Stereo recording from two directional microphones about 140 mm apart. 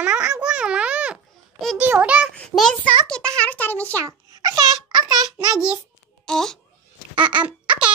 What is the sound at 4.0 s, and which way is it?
Babbling, 25° right (ahead or behind).